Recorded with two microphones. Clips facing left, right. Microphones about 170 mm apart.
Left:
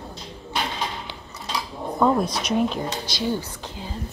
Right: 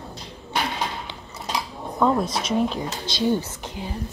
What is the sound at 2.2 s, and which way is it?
A woman's voice, 25° right (ahead or behind).